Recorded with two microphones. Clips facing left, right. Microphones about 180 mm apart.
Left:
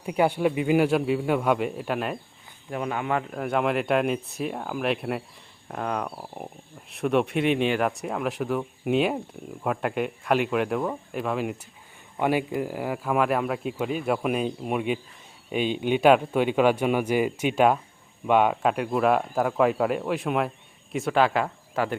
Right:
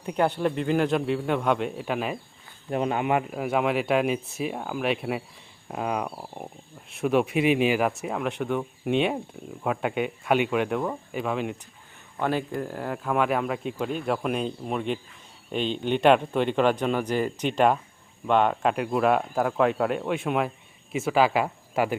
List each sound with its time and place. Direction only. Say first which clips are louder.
0.0 s speech: left 2 dB; 5° left (ahead or behind)
2.6 s speech: right 3 dB; 25° right (ahead or behind)
3.2 s speech: even; 5° right (ahead or behind)
12.1 s speech: left 2 dB; 10° left (ahead or behind); by 21.9 s 10° right (ahead or behind)